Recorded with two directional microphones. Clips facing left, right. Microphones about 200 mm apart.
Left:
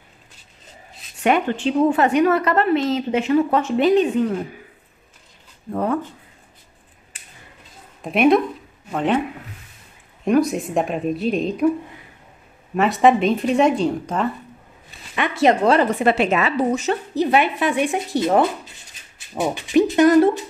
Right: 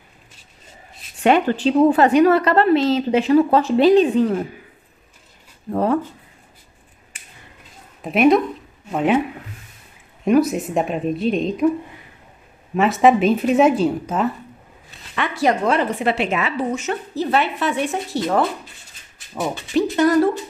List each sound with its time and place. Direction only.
1.2 s a woman's voice: 35° right (ahead or behind)
5.7 s a woman's voice: 35° right (ahead or behind)
8.0 s speech: centre (ahead or behind)
10.2 s speech: centre (ahead or behind)
12.7 s speech: centre (ahead or behind)
15.1 s speech: 20° left (ahead or behind)
15.6 s speech: 40° left (ahead or behind)
17.1 s speech: 15° left (ahead or behind)